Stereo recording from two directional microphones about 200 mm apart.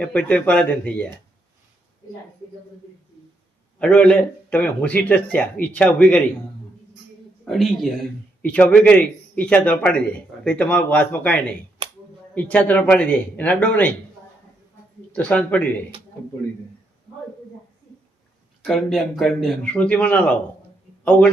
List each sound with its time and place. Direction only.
0.0 s a man's voice: 5° left (ahead or behind)
3.8 s a man's voice: 5° left (ahead or behind)
7.4 s a man's voice: centre (ahead or behind)
11.8 s a sound: 20° right (ahead or behind)
12.3 s a man's voice: 5° left (ahead or behind)
15.1 s a man's voice: 5° left (ahead or behind)
18.6 s a man's voice: centre (ahead or behind)